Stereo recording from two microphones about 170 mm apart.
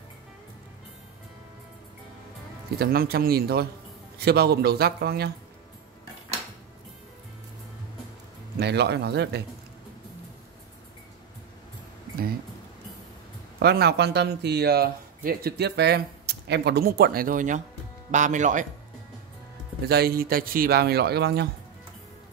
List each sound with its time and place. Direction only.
2.8 s a man's voice: 65° right (ahead or behind)
8.5 s a man's voice: 80° right
13.6 s a man's voice: 70° right (ahead or behind); by 18.7 s 50° right (ahead or behind)
19.9 s a man's voice: 65° right (ahead or behind)